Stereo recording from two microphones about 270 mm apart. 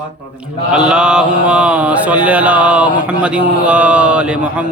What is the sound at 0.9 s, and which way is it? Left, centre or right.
Mantra, centre.